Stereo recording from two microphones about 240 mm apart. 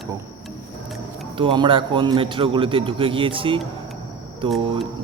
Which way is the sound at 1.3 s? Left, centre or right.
Centre.